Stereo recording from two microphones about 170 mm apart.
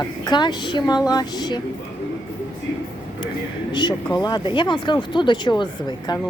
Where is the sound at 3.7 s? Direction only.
25° left (ahead or behind).